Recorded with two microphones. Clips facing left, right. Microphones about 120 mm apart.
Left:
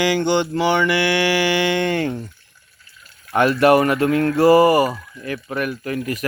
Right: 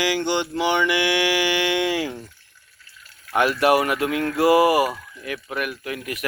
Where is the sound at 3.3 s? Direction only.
5° right (ahead or behind).